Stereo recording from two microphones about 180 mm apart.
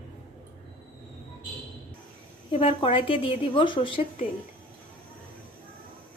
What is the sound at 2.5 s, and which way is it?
A woman's voice, 30° left (ahead or behind).